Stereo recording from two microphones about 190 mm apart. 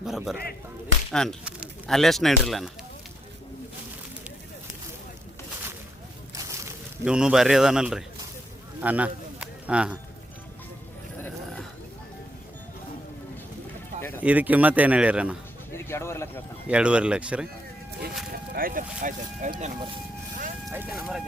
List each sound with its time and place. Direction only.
0.0 s speech: centre (ahead or behind)
6.3 s a sound: 15° right (ahead or behind)
14.2 s speech: 10° right (ahead or behind)
15.7 s speech: 15° left (ahead or behind)
16.6 s speech: 5° right (ahead or behind)
18.5 s speech: 45° right (ahead or behind)
20.7 s speech: 10° right (ahead or behind)